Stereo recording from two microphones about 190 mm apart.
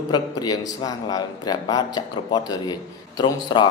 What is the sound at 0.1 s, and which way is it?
Speech, 20° left (ahead or behind).